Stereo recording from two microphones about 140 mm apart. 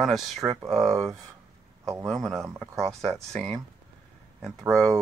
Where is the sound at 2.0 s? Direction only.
Centre (ahead or behind).